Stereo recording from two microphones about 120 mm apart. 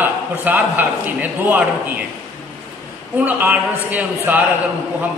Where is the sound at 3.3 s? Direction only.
15° right (ahead or behind).